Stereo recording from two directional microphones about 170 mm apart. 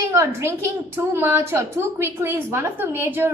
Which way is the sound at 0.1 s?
15° right (ahead or behind).